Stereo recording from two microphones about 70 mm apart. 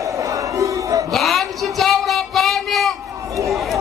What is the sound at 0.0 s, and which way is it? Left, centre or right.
Battle cry, right.